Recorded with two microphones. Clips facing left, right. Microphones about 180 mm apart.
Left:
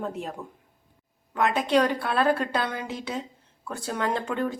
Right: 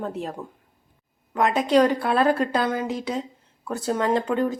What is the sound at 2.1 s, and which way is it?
Speech, 5° right (ahead or behind).